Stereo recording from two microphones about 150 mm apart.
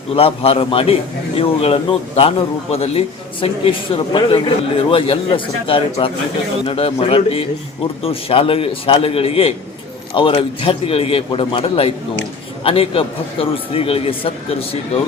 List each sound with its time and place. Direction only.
0.2 s a man's voice: 40° left (ahead or behind)